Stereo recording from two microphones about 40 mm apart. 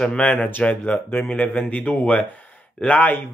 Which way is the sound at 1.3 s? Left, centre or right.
Left.